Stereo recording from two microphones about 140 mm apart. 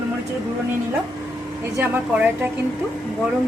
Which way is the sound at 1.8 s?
10° right (ahead or behind).